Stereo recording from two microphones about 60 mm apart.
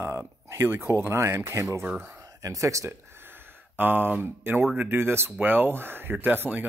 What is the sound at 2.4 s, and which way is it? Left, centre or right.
Speech, right.